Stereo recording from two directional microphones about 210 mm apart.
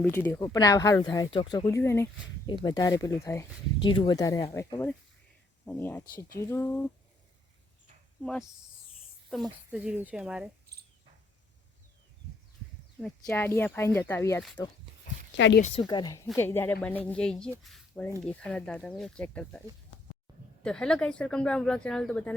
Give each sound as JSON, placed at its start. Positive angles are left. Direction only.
{"t": 0.0, "sound": "speech", "side_deg": 10}
{"t": 8.2, "sound": "speech", "side_deg": 5}
{"t": 10.7, "sound": "cricket", "side_deg": -50}
{"t": 13.0, "sound": "speech", "side_deg": 5}
{"t": 15.4, "sound": "speech", "side_deg": 60}
{"t": 15.6, "sound": "a woman's voice", "side_deg": 25}
{"t": 20.7, "sound": "speech", "side_deg": 5}